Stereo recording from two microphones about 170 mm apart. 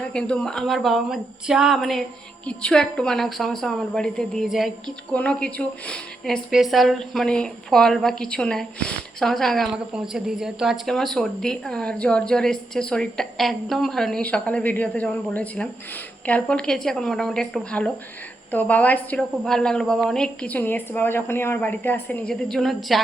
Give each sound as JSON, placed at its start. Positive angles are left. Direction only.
{"t": 0.1, "sound": "a woman's voice", "side_deg": 5}